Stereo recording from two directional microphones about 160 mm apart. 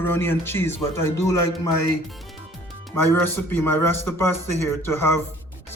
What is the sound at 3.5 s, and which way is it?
Speech, 10° left (ahead or behind).